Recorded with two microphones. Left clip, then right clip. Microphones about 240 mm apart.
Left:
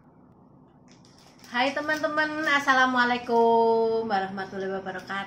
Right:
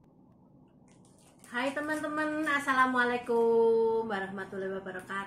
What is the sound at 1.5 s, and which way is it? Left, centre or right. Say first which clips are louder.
A woman's voice: left 7 dB; left.